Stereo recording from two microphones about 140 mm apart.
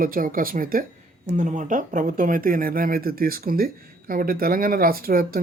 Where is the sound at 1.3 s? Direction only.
60° right (ahead or behind).